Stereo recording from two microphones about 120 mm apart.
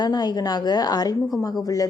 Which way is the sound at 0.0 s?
35° left (ahead or behind).